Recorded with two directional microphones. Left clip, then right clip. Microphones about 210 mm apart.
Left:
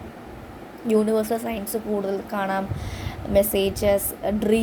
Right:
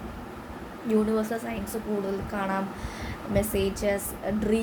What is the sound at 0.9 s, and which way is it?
A woman's voice, 35° left (ahead or behind).